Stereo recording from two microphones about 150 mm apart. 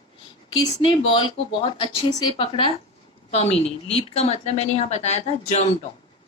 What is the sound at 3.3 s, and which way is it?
A woman's voice, 45° left (ahead or behind).